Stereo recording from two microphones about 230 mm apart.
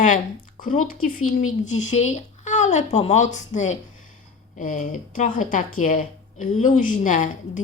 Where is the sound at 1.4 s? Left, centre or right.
Left.